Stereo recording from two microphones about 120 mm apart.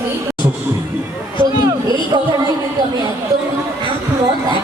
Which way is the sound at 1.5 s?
35° right (ahead or behind).